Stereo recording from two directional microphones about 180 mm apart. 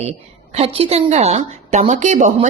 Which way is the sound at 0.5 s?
35° right (ahead or behind).